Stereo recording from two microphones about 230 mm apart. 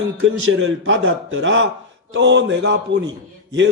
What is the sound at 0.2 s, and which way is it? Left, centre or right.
A man's voice, right.